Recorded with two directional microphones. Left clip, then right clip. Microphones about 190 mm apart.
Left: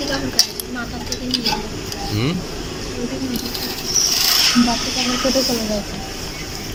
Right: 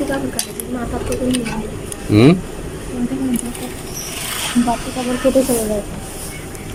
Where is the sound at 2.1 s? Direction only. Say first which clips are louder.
Right 13 dB; 60° right (ahead or behind).